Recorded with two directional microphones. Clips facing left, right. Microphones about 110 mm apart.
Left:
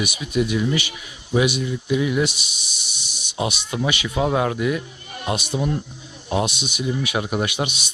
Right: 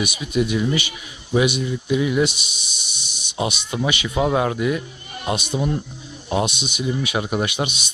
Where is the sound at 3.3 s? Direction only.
Centre (ahead or behind).